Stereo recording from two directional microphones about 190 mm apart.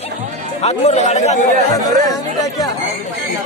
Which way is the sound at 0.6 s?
35° left (ahead or behind).